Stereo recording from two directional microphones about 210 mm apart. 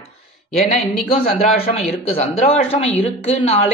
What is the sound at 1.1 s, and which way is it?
Speech, 25° left (ahead or behind).